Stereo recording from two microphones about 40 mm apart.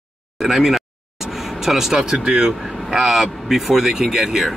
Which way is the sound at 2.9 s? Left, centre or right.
Centre.